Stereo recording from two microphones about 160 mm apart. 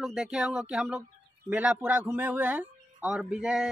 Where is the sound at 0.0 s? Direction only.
5° right (ahead or behind).